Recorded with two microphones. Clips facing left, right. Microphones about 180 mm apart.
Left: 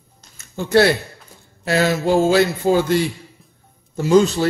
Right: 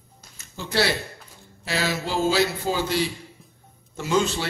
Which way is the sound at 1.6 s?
50° left (ahead or behind).